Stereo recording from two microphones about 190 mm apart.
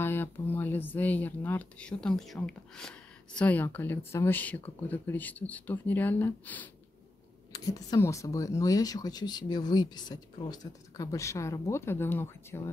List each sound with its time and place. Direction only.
0.0 s speech: 10° left (ahead or behind)
7.5 s speech: 20° left (ahead or behind)